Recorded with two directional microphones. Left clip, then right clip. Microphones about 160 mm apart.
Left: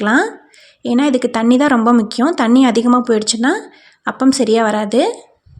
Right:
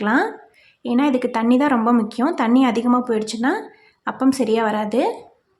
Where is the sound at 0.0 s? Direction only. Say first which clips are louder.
Left 5 dB; 30° left (ahead or behind).